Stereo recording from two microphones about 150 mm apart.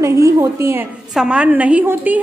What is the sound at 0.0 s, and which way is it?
Speech, 20° right (ahead or behind).